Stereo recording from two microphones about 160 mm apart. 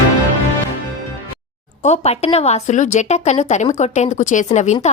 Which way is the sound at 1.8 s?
45° left (ahead or behind).